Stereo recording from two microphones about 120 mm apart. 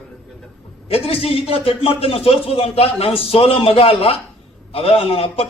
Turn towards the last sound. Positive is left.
turn(degrees=55)  # may be behind; listen again after turning